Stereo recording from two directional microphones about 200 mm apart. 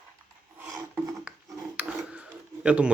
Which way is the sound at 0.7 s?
15° right (ahead or behind).